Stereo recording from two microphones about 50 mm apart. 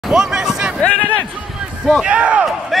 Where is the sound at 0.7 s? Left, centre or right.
Left.